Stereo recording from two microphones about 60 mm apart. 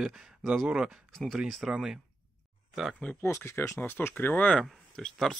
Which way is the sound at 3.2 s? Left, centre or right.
Left.